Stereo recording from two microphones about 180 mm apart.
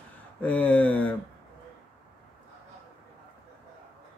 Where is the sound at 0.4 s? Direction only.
10° left (ahead or behind).